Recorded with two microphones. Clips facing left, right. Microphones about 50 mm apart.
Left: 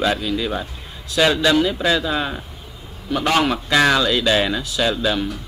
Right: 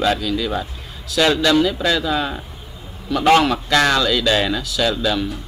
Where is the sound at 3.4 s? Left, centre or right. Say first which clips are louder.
Right 1 dB; centre.